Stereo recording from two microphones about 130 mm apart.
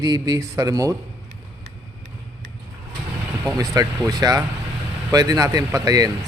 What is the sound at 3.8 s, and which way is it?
A man's voice, 30° right (ahead or behind).